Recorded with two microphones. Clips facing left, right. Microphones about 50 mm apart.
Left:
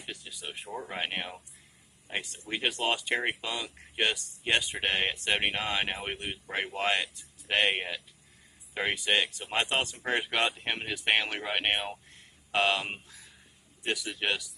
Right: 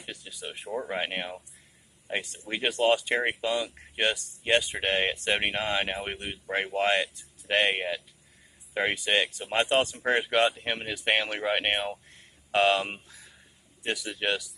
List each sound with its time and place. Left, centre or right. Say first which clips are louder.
0.0 s a sound: right 1 dB; centre
0.9 s speech: even; centre
2.0 s speech: right 3 dB; centre
2.6 s speech: right 6 dB; centre
13.9 s speech: right 3 dB; centre